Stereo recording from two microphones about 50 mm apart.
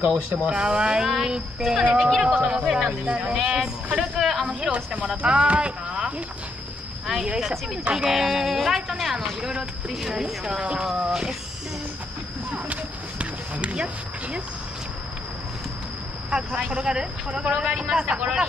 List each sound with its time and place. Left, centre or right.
0.0 s speech: right
4.2 s a sound: centre
4.6 s speech: right
7.2 s speech: centre
13.2 s a sound: right
16.7 s speech: centre